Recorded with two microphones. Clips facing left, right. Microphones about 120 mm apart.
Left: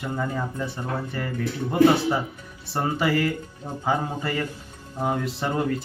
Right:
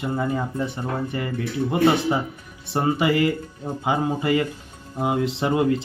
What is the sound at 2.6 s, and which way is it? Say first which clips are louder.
Speech: right 3 dB; 15° right (ahead or behind).